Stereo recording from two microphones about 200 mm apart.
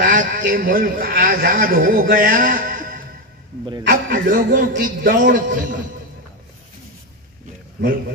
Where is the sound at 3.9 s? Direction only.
45° right (ahead or behind).